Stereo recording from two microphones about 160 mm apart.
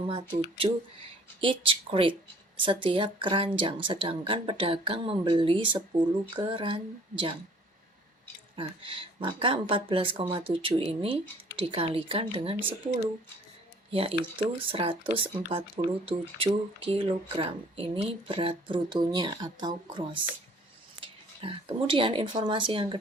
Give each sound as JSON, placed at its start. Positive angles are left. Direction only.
{"t": 0.5, "sound": "speech", "side_deg": -35}
{"t": 8.5, "sound": "speech", "side_deg": -30}
{"t": 13.9, "sound": "speech", "side_deg": -35}